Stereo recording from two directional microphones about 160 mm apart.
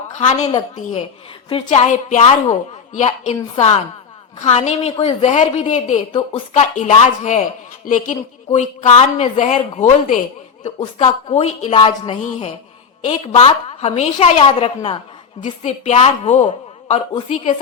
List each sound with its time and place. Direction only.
0.2 s a woman's voice: 45° left (ahead or behind)
1.5 s a woman's voice: 40° left (ahead or behind)
6.1 s a woman's voice: 30° left (ahead or behind)
6.5 s a woman's voice: 50° left (ahead or behind)
8.1 s a woman's voice: 45° left (ahead or behind)